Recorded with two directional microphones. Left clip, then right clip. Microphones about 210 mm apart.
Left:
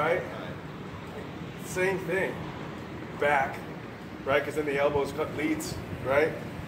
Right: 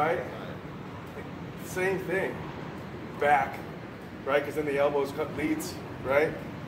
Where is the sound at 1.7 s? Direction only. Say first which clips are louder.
Left 1 dB; 5° right (ahead or behind).